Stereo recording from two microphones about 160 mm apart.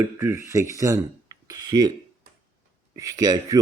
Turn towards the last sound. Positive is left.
turn(degrees=-25)  # may be behind; listen again after turning